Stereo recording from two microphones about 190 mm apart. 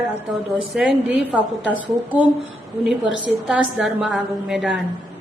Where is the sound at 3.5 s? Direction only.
Centre (ahead or behind).